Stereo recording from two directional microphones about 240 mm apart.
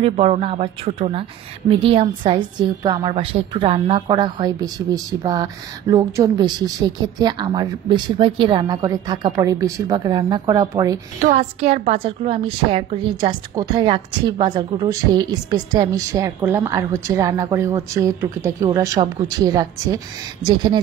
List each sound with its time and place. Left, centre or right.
0.0 s a woman's voice: right
11.1 s a woman's voice: right